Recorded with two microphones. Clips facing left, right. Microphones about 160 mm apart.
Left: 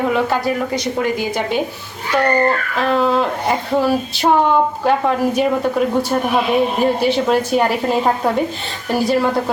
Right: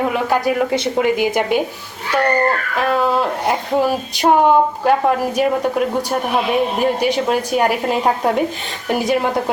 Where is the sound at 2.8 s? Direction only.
10° right (ahead or behind).